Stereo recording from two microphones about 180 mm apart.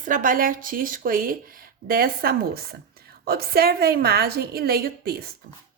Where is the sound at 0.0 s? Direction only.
45° right (ahead or behind).